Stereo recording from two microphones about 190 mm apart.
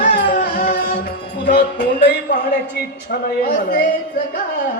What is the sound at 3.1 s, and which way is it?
Speech, 55° left (ahead or behind).